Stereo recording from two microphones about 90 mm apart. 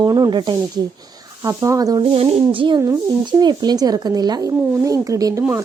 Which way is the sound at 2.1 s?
85° right.